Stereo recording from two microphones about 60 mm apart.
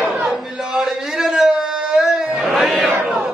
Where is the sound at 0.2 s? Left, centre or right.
Centre.